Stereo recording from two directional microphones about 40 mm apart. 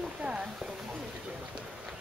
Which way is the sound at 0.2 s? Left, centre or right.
Right.